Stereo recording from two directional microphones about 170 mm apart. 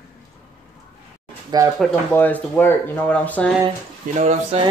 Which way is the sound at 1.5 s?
25° right (ahead or behind).